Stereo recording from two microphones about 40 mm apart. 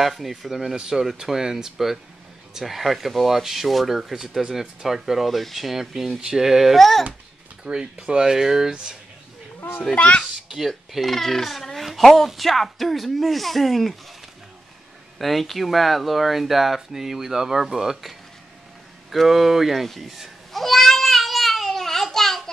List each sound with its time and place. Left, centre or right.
0.0 s speech: centre
7.7 s speech: right
9.6 s a child's voice: left
9.9 s a child's voice: left
11.0 s a child's voice: centre
15.1 s speech: centre
19.0 s cat: centre